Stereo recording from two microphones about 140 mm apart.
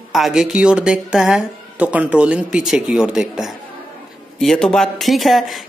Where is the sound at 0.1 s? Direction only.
Centre (ahead or behind).